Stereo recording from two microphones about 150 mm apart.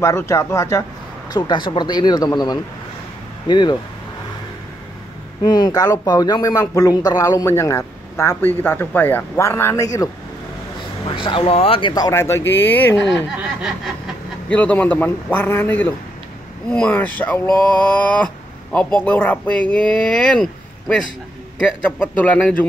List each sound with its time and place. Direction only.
0.0 s speech: 20° left (ahead or behind)
1.3 s speech: 30° left (ahead or behind)
5.4 s speech: 30° left (ahead or behind)
11.1 s speech: 35° left (ahead or behind)
11.9 s speech: 20° left (ahead or behind)
13.1 s speech: 5° right (ahead or behind)
14.5 s speech: 10° left (ahead or behind)
21.8 s speech: 10° left (ahead or behind)